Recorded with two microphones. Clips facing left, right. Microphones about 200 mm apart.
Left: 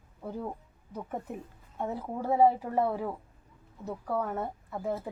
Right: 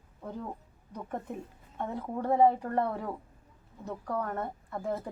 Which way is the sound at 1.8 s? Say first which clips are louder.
Even; 5° left (ahead or behind).